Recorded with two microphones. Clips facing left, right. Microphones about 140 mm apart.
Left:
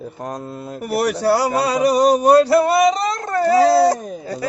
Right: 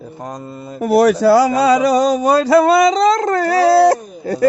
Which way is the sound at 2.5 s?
90° right.